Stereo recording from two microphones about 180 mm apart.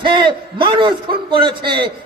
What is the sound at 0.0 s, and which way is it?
A man's voice, 25° right (ahead or behind).